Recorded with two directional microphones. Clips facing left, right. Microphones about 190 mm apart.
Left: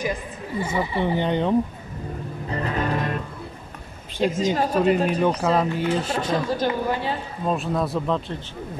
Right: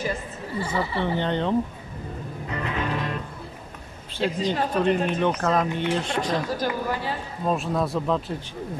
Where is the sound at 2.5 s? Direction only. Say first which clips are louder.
Left 3 dB; 40° left (ahead or behind).